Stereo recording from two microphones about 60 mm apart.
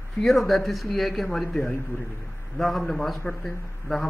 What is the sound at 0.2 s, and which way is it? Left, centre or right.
A man's voice, centre.